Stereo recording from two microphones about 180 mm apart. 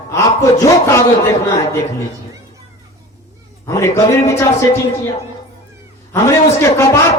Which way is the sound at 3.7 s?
15° left (ahead or behind).